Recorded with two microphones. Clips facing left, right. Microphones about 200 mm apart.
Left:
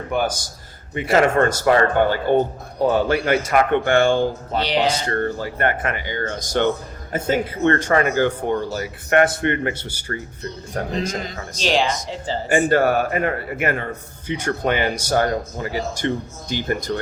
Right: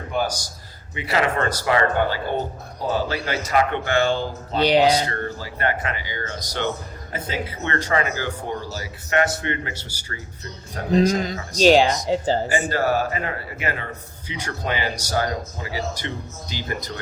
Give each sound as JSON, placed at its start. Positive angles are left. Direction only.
{"t": 0.1, "sound": "a man's voice", "side_deg": 60}
{"t": 0.9, "sound": "speech", "side_deg": 50}
{"t": 11.6, "sound": "speech", "side_deg": -45}
{"t": 12.5, "sound": "a man's voice", "side_deg": 55}